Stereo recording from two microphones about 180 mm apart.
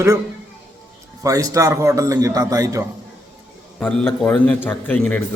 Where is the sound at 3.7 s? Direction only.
5° left (ahead or behind).